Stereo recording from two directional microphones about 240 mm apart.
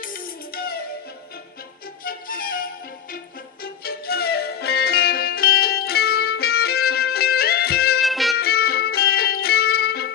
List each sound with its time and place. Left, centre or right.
0.0 s music: left
2.0 s music: left
8.0 s music: centre
8.4 s music: left